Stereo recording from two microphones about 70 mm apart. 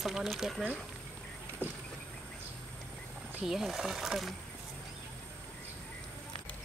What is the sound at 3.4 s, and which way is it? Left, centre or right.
Speech, centre.